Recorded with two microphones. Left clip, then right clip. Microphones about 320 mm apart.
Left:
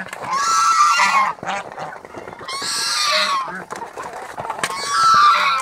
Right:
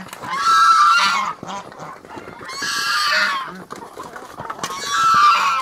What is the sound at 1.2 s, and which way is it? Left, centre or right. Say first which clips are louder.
Goose: left 4 dB; left.